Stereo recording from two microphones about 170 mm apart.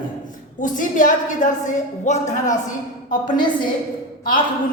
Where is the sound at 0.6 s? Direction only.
50° left (ahead or behind).